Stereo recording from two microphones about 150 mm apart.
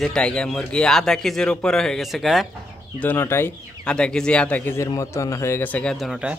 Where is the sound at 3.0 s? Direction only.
15° left (ahead or behind).